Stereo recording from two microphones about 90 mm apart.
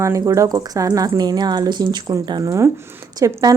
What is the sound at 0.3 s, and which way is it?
Speech, 45° right (ahead or behind).